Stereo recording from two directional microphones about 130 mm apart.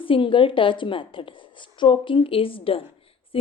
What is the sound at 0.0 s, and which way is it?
A woman's voice, 40° left (ahead or behind).